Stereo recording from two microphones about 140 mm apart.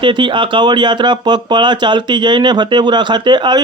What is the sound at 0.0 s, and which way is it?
A man's voice, 35° right (ahead or behind).